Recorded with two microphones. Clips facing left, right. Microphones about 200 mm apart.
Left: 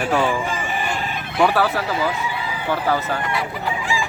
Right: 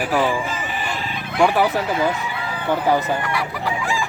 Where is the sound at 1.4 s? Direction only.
15° right (ahead or behind).